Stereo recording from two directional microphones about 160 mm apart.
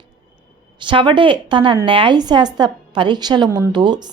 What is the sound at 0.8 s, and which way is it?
A woman's voice, 30° right (ahead or behind).